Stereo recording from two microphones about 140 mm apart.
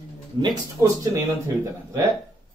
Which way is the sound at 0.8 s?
20° right (ahead or behind).